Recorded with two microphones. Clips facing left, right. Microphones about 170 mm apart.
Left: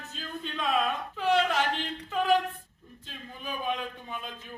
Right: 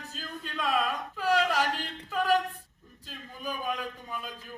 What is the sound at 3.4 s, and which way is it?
Speech, 5° right (ahead or behind).